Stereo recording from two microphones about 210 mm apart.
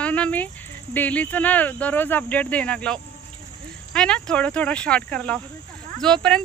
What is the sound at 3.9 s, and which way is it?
Speech, 5° left (ahead or behind).